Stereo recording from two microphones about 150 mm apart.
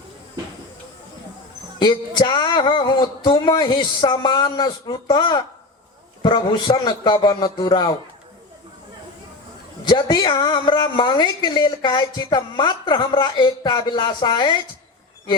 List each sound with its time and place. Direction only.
1.8 s a woman's voice: 30° left (ahead or behind)
9.9 s a woman's voice: 30° left (ahead or behind)